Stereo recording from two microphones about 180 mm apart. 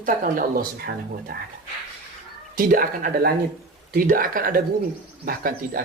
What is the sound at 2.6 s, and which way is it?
Speech, 50° right (ahead or behind).